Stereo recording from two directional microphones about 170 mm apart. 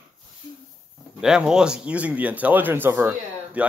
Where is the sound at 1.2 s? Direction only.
5° right (ahead or behind).